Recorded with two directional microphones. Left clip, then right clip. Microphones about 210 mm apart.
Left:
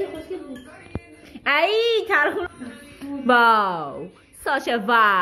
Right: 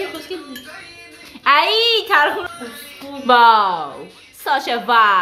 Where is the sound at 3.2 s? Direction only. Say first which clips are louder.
Right 5 dB; 15° left (ahead or behind).